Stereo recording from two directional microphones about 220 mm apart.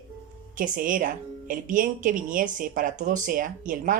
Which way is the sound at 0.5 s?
40° right (ahead or behind).